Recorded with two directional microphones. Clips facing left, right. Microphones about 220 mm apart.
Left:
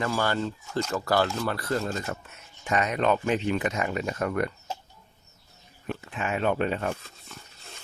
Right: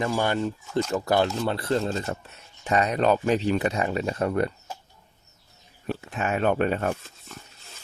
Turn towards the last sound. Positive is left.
turn(degrees=-50)  # may be behind; listen again after turning